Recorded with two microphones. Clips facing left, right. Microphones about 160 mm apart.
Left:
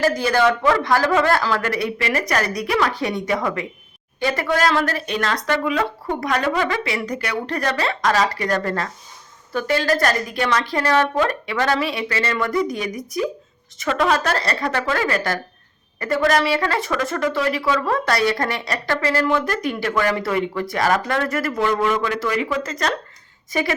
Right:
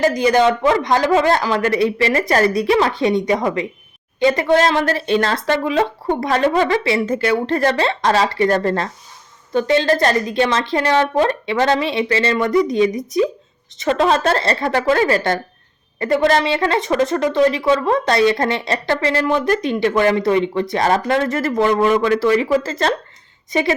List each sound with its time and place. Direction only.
0.0 s speech: 20° right (ahead or behind)
21.5 s a man's voice: 35° right (ahead or behind)